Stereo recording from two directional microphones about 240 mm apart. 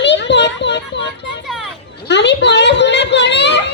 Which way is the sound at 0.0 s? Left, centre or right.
Left.